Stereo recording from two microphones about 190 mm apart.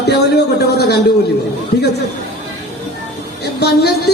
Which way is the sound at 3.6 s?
60° left (ahead or behind).